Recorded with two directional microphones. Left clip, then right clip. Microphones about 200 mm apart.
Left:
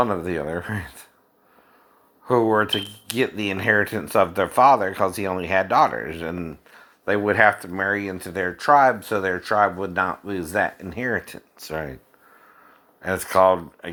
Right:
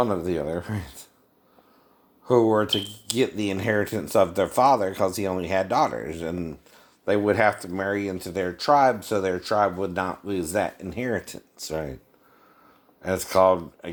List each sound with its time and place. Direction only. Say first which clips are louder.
0.0 s speech: left 2 dB; 15° left (ahead or behind)
2.2 s speech: left 1 dB; 10° left (ahead or behind)
13.0 s speech: left 2 dB; 15° left (ahead or behind)